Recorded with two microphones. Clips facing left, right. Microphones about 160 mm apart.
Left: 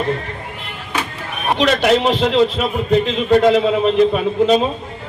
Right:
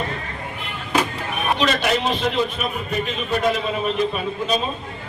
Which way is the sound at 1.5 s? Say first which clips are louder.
Left 8 dB; 80° left.